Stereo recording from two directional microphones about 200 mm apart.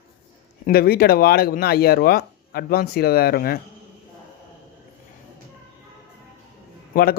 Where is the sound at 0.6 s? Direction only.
50° left (ahead or behind).